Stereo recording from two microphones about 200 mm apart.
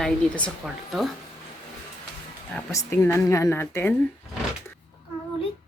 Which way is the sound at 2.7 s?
15° left (ahead or behind).